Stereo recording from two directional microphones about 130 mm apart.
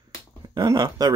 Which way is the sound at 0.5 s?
30° right (ahead or behind).